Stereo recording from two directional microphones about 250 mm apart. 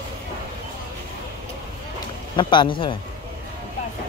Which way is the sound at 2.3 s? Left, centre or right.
Centre.